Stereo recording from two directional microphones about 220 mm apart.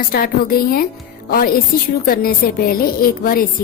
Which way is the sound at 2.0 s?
40° left (ahead or behind).